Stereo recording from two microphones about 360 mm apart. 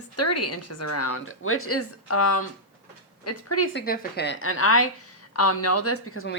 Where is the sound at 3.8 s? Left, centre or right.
Left.